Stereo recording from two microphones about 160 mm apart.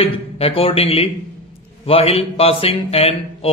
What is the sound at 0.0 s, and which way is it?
Speech, 35° left (ahead or behind).